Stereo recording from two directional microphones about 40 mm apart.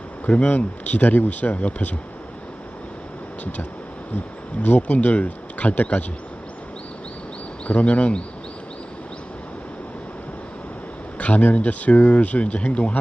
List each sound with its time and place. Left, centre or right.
0.3 s speech: left
4.6 s speech: left
7.7 s speech: left
11.2 s speech: left